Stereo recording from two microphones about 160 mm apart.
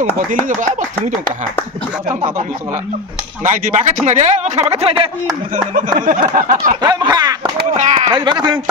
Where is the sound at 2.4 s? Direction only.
60° right (ahead or behind).